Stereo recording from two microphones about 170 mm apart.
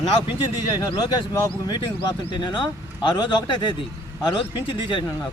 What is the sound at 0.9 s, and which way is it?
Speech, 25° left (ahead or behind).